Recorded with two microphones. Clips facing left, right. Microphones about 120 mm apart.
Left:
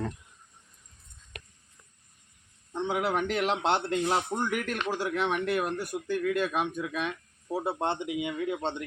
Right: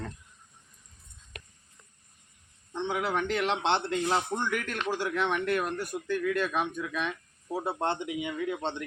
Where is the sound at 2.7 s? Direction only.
10° left (ahead or behind).